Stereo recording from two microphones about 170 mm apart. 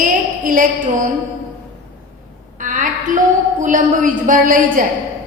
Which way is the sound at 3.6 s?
50° right (ahead or behind).